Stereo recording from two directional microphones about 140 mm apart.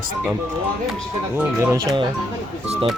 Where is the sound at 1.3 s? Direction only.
15° right (ahead or behind).